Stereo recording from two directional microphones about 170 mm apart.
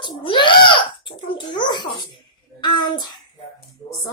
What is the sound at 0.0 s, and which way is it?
Giggle, 30° left (ahead or behind).